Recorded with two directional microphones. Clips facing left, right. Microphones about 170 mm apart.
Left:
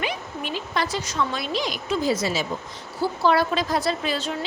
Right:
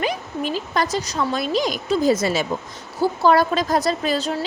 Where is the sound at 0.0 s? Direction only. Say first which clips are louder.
Right 5 dB; 40° right (ahead or behind).